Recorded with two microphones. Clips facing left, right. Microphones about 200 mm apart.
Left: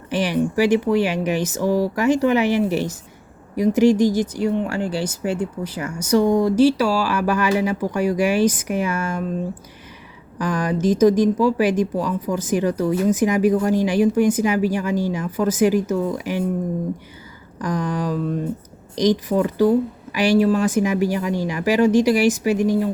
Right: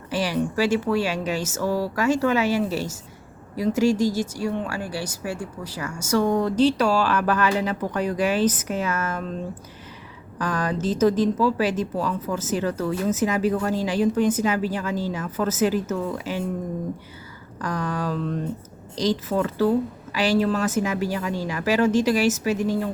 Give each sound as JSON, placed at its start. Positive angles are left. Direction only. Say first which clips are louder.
{"t": 0.1, "sound": "speech", "louder": "left 4 dB", "side_deg": 20}
{"t": 10.3, "sound": "speech", "louder": "left 3 dB", "side_deg": 15}
{"t": 17.6, "sound": "speech", "louder": "left 4 dB", "side_deg": 15}